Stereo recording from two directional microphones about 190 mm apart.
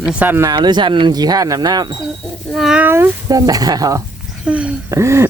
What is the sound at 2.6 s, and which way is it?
Speech, 5° right (ahead or behind).